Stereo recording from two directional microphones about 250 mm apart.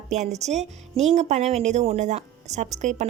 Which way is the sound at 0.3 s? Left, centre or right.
Right.